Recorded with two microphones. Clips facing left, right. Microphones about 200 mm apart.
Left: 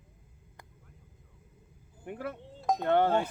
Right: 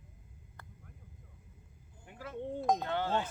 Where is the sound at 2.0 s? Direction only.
60° left (ahead or behind).